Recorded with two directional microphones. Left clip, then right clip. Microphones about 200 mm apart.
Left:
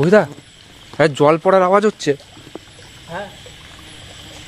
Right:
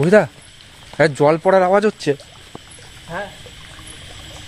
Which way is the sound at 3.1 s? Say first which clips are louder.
Right 1 dB; 25° right (ahead or behind).